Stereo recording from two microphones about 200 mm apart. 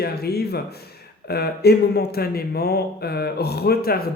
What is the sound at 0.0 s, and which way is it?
Speech, 50° left (ahead or behind).